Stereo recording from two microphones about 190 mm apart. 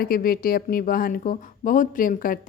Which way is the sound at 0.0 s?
50° left (ahead or behind).